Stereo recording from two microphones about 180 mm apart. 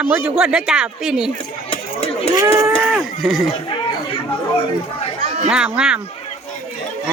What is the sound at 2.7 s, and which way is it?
Livestock, centre (ahead or behind).